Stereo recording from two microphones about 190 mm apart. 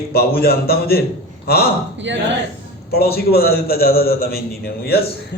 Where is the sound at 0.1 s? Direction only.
55° left (ahead or behind).